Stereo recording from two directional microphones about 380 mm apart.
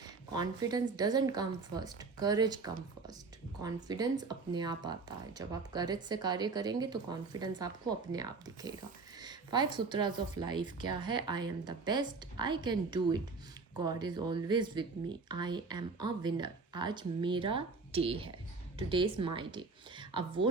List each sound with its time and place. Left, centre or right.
0.3 s speech: centre